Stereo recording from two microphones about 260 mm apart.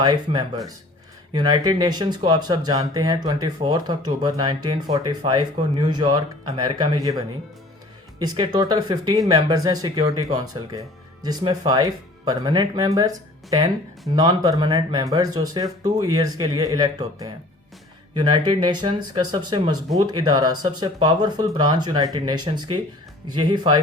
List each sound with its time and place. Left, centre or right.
0.0 s speech: centre
8.5 s speech: centre